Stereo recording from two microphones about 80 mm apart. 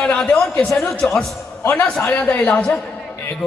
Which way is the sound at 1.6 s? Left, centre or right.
Left.